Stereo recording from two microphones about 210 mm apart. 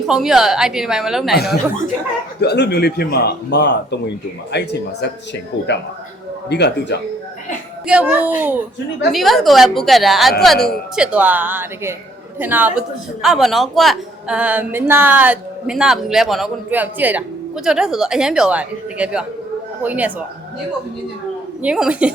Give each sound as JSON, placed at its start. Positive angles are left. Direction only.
{"t": 0.0, "sound": "speech", "side_deg": 0}
{"t": 2.4, "sound": "speech", "side_deg": 50}
{"t": 7.9, "sound": "speech", "side_deg": -5}
{"t": 21.6, "sound": "speech", "side_deg": -5}